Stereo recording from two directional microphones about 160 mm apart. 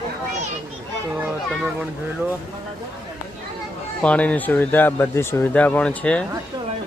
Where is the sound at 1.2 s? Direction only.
5° right (ahead or behind).